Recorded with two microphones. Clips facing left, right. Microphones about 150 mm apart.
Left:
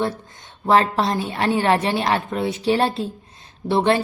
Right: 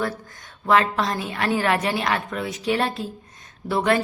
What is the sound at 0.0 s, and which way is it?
A woman's voice, 25° left (ahead or behind).